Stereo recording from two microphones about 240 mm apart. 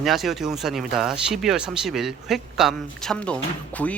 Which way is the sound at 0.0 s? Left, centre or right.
Centre.